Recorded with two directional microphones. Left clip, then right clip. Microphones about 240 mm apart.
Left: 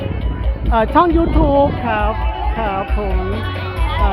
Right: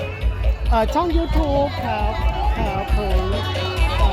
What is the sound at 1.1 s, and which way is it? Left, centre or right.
Speech, left.